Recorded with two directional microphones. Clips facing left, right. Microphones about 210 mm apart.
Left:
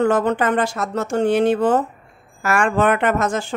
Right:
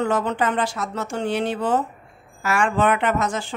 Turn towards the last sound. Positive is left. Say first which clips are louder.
# left 3 dB
turn(degrees=45)  # may be behind; listen again after turning